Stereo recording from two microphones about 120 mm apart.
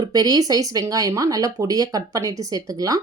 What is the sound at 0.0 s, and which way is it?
Speech, 35° right (ahead or behind).